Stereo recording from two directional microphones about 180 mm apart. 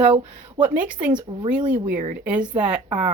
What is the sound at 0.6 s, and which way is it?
Speech, 10° right (ahead or behind).